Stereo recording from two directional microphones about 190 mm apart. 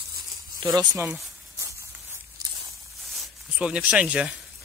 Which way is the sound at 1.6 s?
15° right (ahead or behind).